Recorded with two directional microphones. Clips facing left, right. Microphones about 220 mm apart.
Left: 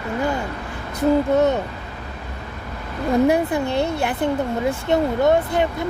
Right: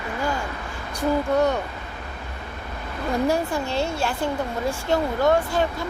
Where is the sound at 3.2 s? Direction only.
20° left (ahead or behind).